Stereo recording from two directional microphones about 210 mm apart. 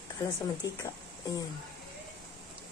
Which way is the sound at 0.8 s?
15° left (ahead or behind).